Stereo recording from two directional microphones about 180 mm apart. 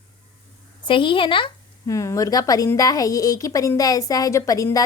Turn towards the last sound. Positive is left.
turn(degrees=20)  # may be behind; listen again after turning